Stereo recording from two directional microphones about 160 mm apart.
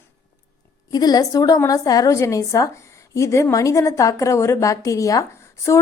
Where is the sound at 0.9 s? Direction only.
25° left (ahead or behind).